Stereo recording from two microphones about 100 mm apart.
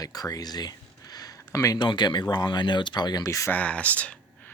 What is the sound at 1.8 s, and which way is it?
Speech, 50° left (ahead or behind).